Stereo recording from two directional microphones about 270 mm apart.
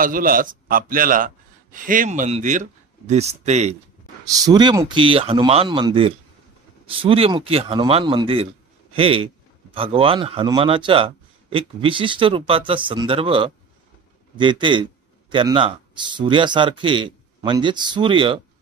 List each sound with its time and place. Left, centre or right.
0.0 s a man's voice: right
4.3 s a man's voice: centre